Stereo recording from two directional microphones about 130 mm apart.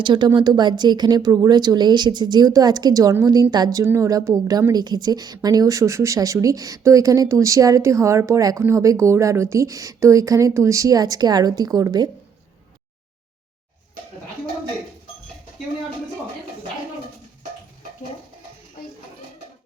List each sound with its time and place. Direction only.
0.0 s a woman's voice: 35° right (ahead or behind)